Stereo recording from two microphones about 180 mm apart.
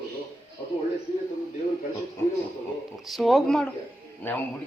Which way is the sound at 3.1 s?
Centre (ahead or behind).